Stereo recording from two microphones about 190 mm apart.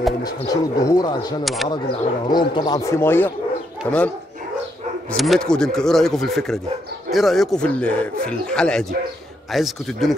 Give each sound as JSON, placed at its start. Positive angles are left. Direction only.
{"t": 0.2, "sound": "speech", "side_deg": 20}
{"t": 1.4, "sound": "speech", "side_deg": 0}
{"t": 1.7, "sound": "speech", "side_deg": 25}
{"t": 5.1, "sound": "speech", "side_deg": 0}